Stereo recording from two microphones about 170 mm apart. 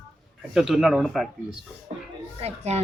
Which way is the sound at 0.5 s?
Centre (ahead or behind).